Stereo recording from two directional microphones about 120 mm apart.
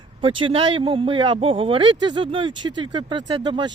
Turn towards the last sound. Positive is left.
turn(degrees=-40)  # may be behind; listen again after turning